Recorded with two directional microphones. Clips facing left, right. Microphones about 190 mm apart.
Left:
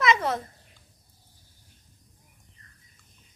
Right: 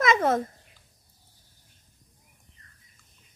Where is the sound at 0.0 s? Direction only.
50° right (ahead or behind).